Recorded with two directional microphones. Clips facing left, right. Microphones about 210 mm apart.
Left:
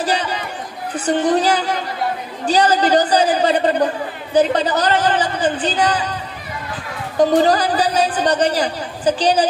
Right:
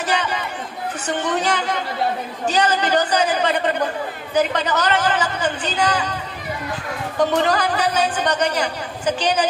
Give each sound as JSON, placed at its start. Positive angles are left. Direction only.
{"t": 0.0, "sound": "a man's voice", "side_deg": 35}
{"t": 7.2, "sound": "a man's voice", "side_deg": 35}